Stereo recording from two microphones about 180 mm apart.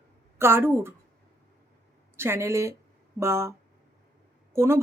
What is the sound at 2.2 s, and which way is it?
Speech, 15° right (ahead or behind).